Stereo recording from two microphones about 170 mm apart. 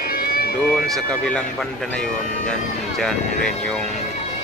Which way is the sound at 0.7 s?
Centre (ahead or behind).